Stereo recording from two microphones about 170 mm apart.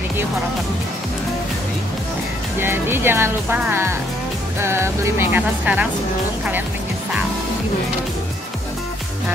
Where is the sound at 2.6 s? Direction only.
15° right (ahead or behind).